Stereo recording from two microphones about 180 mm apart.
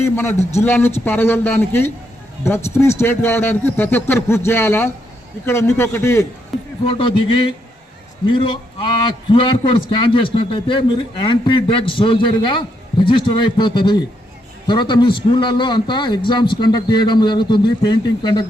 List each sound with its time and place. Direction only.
0.6 s speech: 10° left (ahead or behind)
6.8 s a man's voice: 30° left (ahead or behind)